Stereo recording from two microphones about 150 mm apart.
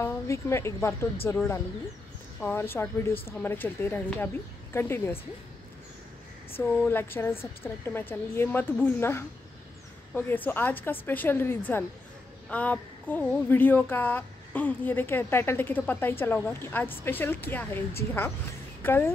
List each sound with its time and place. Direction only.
0.0 s a woman's voice: 20° left (ahead or behind)
2.4 s speech: 15° left (ahead or behind)
6.6 s speech: 15° left (ahead or behind)